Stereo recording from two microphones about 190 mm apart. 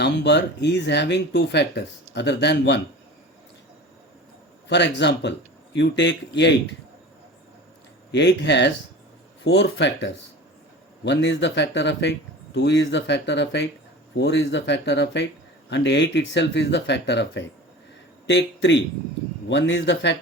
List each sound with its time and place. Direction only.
0.0 s speech: 65° left (ahead or behind)
4.7 s speech: 65° left (ahead or behind)
8.1 s speech: 65° left (ahead or behind)
9.4 s speech: 80° left